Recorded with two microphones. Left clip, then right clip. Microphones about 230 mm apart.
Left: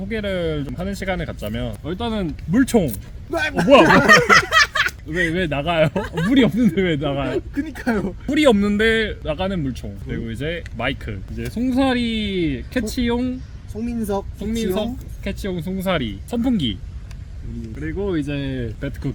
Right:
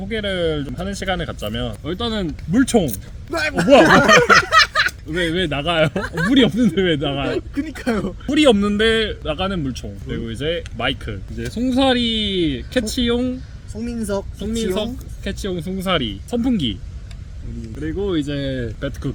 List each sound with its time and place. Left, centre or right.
0.1 s speech: centre
3.3 s a man's voice: right
3.9 s a sound: centre
5.1 s speech: centre
6.0 s speech: centre
6.3 s speech: centre
7.5 s speech: centre
8.3 s speech: centre
13.7 s speech: centre
15.2 s speech: centre
17.7 s speech: centre